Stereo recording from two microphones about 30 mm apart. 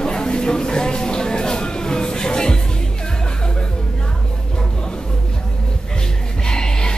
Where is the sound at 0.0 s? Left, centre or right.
Left.